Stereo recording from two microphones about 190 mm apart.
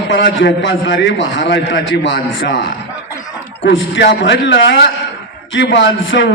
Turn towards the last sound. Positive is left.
turn(degrees=75)  # may be behind; listen again after turning